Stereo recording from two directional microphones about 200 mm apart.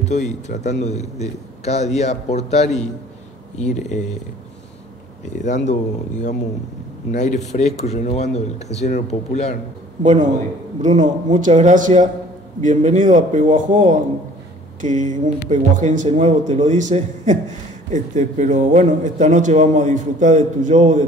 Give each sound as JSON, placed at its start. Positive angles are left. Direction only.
{"t": 0.0, "sound": "a man's voice", "side_deg": 35}
{"t": 5.7, "sound": "a man's voice", "side_deg": 35}
{"t": 11.0, "sound": "a man's voice", "side_deg": -40}